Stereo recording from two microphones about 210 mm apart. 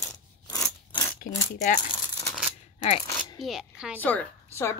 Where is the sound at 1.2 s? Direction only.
40° left (ahead or behind).